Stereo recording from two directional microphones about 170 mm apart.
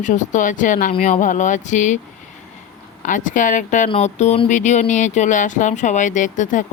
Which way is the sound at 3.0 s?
50° left (ahead or behind).